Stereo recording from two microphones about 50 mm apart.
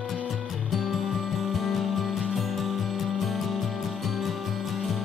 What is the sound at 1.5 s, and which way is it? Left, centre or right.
Music, centre.